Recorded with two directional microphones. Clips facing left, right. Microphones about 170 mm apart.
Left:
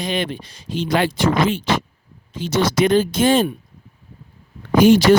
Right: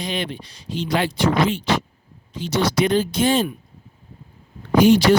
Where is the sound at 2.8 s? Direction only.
50° left (ahead or behind).